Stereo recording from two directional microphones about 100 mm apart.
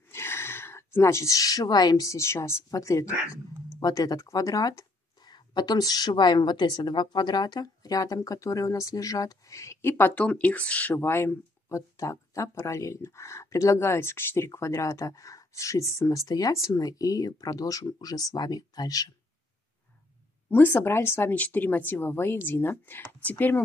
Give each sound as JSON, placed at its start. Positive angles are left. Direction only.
{"t": 0.1, "sound": "speech", "side_deg": 25}
{"t": 20.4, "sound": "speech", "side_deg": 20}